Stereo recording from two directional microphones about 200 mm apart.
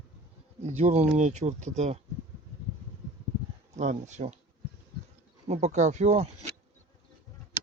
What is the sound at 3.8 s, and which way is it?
Speech, 35° right (ahead or behind).